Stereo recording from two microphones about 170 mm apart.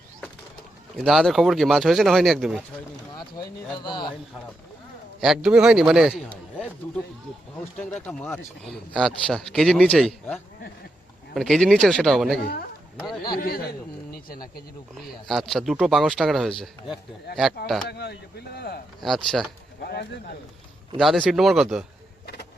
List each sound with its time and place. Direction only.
0.9 s a man's voice: centre (ahead or behind)
3.8 s a man's voice: 25° left (ahead or behind)
5.2 s a man's voice: 5° right (ahead or behind)
13.3 s a man's voice: 65° left (ahead or behind)
15.3 s a man's voice: centre (ahead or behind)
17.8 s speech: 75° left (ahead or behind)
18.9 s a man's voice: centre (ahead or behind)
19.8 s speech: 80° left
21.0 s a man's voice: centre (ahead or behind)